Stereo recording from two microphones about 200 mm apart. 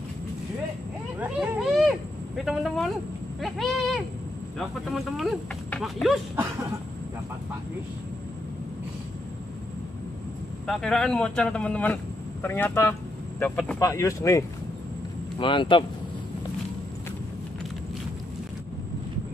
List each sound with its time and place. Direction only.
1.2 s speech: 5° right (ahead or behind)
10.7 s speech: centre (ahead or behind); by 15.8 s 25° left (ahead or behind)